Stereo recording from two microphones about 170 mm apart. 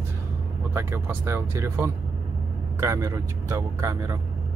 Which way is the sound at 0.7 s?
15° right (ahead or behind).